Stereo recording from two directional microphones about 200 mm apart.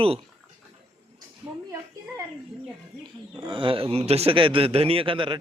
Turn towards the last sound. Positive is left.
turn(degrees=-25)  # may be behind; listen again after turning